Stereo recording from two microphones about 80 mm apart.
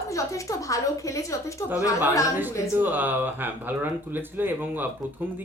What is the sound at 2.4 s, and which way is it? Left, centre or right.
Speech, right.